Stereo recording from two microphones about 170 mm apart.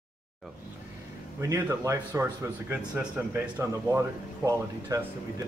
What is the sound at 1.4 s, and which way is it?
A man's voice, 15° right (ahead or behind).